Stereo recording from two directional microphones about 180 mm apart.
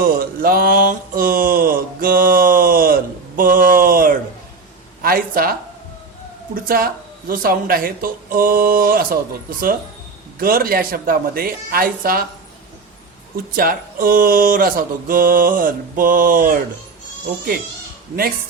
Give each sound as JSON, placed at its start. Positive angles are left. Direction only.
{"t": 0.0, "sound": "mantra", "side_deg": -55}
{"t": 5.0, "sound": "speech", "side_deg": -55}
{"t": 10.4, "sound": "speech", "side_deg": -55}
{"t": 13.3, "sound": "speech", "side_deg": -55}